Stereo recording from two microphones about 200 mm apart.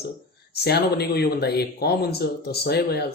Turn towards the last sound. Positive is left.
turn(degrees=55)  # may be behind; listen again after turning